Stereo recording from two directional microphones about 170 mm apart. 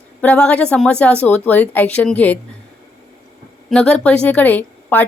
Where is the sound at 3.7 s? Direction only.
5° left (ahead or behind).